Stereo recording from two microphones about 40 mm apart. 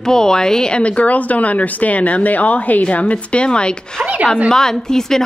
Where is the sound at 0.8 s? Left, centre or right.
Left.